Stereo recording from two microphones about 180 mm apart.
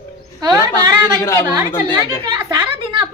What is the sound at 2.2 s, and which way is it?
Speech, 20° right (ahead or behind).